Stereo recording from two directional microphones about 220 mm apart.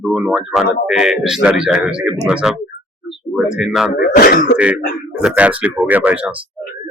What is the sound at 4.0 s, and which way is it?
Speech, 45° left (ahead or behind).